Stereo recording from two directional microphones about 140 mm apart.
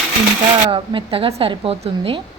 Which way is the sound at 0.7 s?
40° right (ahead or behind).